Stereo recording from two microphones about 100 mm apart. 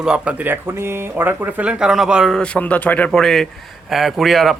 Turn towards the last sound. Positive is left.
turn(degrees=0)  # may be behind; listen again after turning